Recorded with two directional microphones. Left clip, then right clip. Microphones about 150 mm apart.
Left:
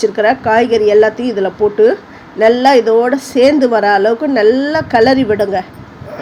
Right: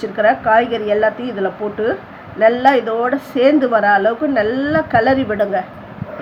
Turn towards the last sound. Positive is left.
turn(degrees=40)  # may be behind; listen again after turning